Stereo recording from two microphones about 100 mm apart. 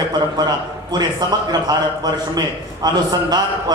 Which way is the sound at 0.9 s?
45° right (ahead or behind).